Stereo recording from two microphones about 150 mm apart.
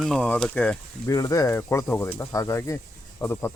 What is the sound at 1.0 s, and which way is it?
Speech, 20° left (ahead or behind).